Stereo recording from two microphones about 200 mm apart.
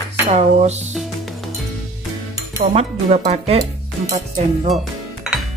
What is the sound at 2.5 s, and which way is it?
Speech, 35° right (ahead or behind).